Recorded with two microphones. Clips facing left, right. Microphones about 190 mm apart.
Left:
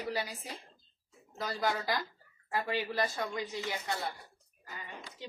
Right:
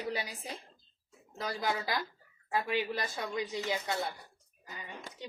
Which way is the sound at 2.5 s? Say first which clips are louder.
Right 1 dB; 15° right (ahead or behind).